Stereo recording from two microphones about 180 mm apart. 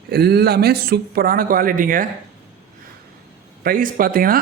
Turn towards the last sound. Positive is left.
turn(degrees=-55)  # may be behind; listen again after turning